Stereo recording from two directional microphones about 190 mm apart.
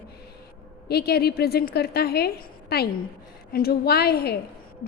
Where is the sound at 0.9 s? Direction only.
55° left (ahead or behind).